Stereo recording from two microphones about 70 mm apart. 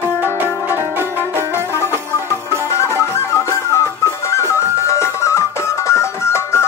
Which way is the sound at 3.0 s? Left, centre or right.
Left.